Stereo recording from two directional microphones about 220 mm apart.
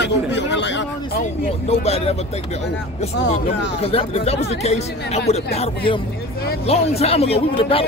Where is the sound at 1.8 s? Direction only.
30° left (ahead or behind).